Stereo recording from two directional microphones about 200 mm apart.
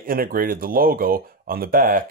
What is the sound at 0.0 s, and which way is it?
Speech, 45° right (ahead or behind).